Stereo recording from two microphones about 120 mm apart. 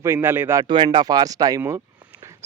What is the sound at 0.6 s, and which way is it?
Speech, 40° right (ahead or behind).